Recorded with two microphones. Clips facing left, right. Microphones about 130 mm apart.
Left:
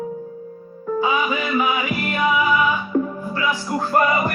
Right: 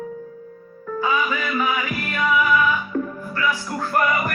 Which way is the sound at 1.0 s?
20° left (ahead or behind).